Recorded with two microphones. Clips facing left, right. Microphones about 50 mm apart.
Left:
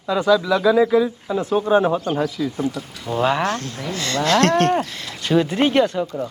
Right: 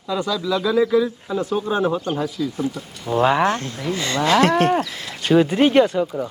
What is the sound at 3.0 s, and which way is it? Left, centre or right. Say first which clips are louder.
Cattle: right 2 dB; centre.